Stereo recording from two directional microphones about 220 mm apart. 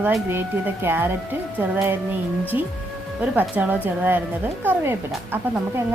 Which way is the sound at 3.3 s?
10° right (ahead or behind).